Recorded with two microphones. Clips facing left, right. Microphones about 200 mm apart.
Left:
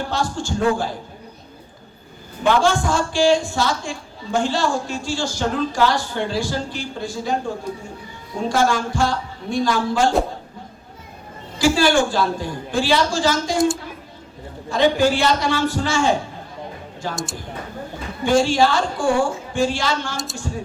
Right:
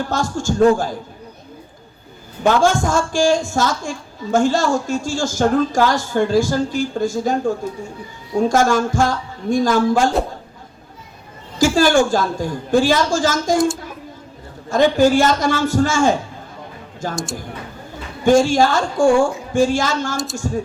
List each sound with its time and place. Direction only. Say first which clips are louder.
0.1 s a man's voice: right 3 dB; 45° right (ahead or behind)
2.4 s a man's voice: right 2 dB; 45° right (ahead or behind)
11.6 s a man's voice: right 3 dB; 45° right (ahead or behind)
14.7 s a man's voice: right 3 dB; 45° right (ahead or behind)
18.3 s a man's voice: right 3 dB; 45° right (ahead or behind)